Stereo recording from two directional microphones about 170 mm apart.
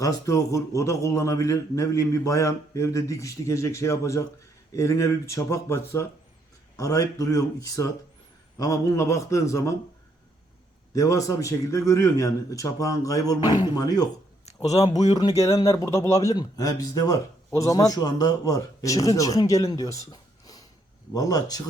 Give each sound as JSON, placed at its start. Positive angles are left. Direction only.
{"t": 0.0, "sound": "a man's voice", "side_deg": 20}
{"t": 10.9, "sound": "speech", "side_deg": 20}
{"t": 14.7, "sound": "speech", "side_deg": 40}
{"t": 15.4, "sound": "speech", "side_deg": 15}